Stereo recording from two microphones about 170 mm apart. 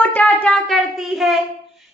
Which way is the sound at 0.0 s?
10° left (ahead or behind).